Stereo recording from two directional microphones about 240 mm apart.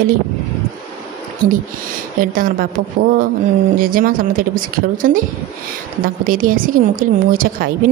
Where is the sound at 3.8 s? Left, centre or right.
Right.